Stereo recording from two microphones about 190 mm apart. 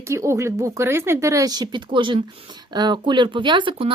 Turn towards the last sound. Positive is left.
turn(degrees=-25)  # may be behind; listen again after turning